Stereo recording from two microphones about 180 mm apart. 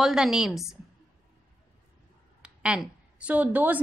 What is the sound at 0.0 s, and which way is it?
Speech, centre (ahead or behind).